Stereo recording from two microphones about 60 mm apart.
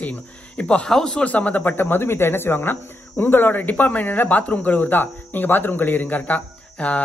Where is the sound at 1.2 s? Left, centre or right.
Left.